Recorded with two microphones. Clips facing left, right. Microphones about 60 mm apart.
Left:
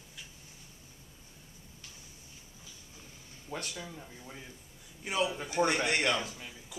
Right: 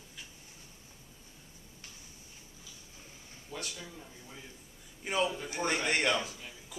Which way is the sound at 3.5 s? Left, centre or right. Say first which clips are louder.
Left 3 dB; left.